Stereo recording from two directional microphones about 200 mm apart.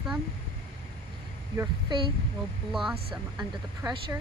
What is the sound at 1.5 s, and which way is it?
Speech, 20° right (ahead or behind).